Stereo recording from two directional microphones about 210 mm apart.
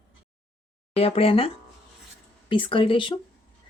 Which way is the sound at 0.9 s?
30° left (ahead or behind).